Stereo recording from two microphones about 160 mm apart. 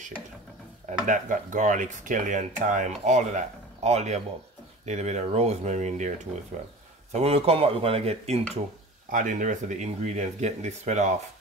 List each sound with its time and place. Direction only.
0.8 s speech: 50° right (ahead or behind)
9.1 s speech: 50° right (ahead or behind)